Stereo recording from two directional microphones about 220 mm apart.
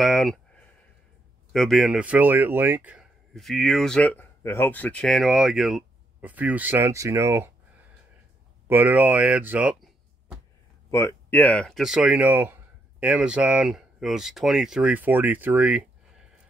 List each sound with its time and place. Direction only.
0.0 s speech: centre (ahead or behind)
1.5 s speech: centre (ahead or behind)
8.6 s speech: 10° right (ahead or behind)
10.9 s speech: 15° left (ahead or behind); by 15.8 s 5° right (ahead or behind)